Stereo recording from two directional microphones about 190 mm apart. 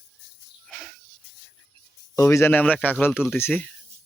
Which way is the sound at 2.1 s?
15° left (ahead or behind).